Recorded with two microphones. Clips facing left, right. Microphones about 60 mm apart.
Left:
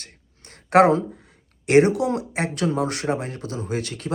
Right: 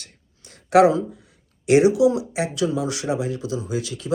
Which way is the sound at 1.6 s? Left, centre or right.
Left.